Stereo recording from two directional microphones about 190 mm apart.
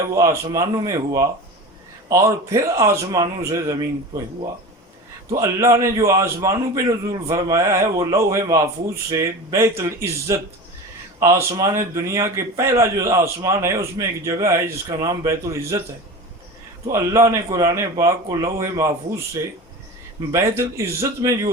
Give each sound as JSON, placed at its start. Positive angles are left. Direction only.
{"t": 0.2, "sound": "a man's voice", "side_deg": -15}
{"t": 5.4, "sound": "a man's voice", "side_deg": -15}
{"t": 16.8, "sound": "a man's voice", "side_deg": -15}